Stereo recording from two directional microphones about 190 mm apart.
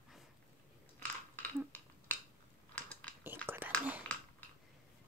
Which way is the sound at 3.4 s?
10° right (ahead or behind).